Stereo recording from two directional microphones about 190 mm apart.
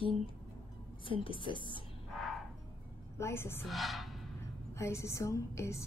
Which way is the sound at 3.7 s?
Centre (ahead or behind).